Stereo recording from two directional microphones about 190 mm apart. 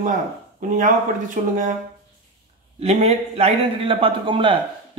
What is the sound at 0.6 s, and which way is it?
Speech, 40° right (ahead or behind).